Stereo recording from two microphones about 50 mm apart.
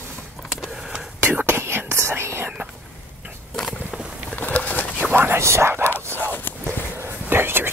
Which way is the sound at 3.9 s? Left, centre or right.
Centre.